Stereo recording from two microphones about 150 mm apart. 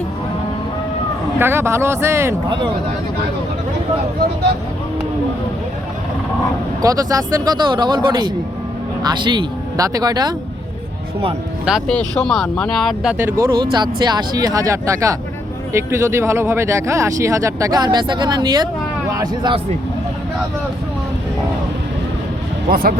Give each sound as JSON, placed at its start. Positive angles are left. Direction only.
{"t": 1.4, "sound": "speech", "side_deg": -15}
{"t": 6.8, "sound": "speech", "side_deg": -25}
{"t": 11.9, "sound": "speech", "side_deg": 5}
{"t": 13.4, "sound": "speech", "side_deg": -30}
{"t": 22.7, "sound": "speech", "side_deg": -75}